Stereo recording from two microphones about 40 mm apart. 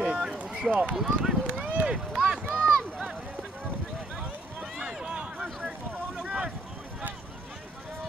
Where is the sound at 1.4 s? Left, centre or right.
Right.